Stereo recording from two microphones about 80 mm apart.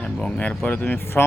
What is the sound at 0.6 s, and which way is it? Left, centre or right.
Speech, left.